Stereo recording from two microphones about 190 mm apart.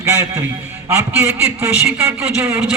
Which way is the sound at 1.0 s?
10° right (ahead or behind).